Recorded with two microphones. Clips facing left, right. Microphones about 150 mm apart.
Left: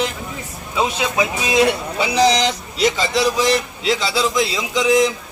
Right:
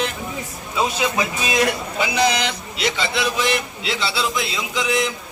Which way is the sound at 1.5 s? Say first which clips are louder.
Left 6 dB; 25° left (ahead or behind).